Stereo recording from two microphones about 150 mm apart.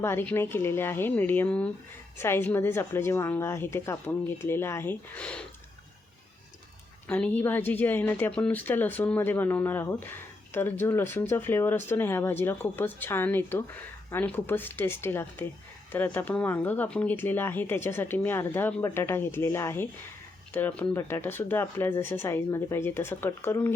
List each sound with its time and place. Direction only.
0.0 s speech: 15° left (ahead or behind)
7.1 s speech: 10° left (ahead or behind)